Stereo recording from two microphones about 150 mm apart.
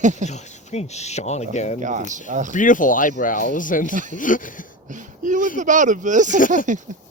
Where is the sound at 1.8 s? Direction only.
55° right (ahead or behind).